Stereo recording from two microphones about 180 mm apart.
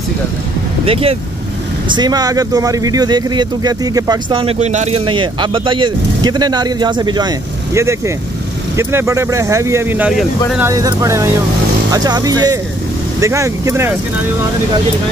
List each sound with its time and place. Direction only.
0.8 s speech: 30° right (ahead or behind); by 10.2 s 5° right (ahead or behind)
10.6 s speech: 20° right (ahead or behind)